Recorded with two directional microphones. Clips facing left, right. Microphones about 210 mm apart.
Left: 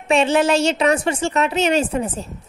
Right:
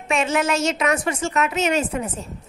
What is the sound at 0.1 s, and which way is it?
A woman's voice, 30° left (ahead or behind).